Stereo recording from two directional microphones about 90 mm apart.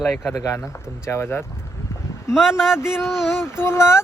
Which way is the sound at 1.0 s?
25° left (ahead or behind).